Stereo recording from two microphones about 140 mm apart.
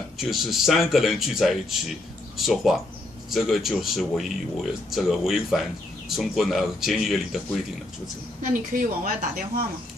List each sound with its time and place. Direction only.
0.2 s speech: centre (ahead or behind)
8.4 s a woman's voice: 80° right